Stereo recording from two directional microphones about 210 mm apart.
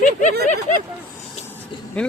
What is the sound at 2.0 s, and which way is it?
Speech, 5° left (ahead or behind).